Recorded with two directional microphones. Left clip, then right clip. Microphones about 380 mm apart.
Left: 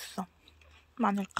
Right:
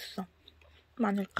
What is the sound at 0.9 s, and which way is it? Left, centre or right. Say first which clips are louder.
Speech: left 2 dB; centre.